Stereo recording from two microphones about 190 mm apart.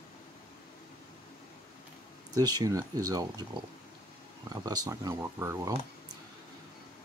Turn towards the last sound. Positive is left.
turn(degrees=-15)  # may be behind; listen again after turning